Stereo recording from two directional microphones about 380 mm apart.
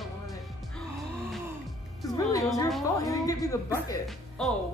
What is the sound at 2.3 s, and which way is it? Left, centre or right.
A woman's voice, centre.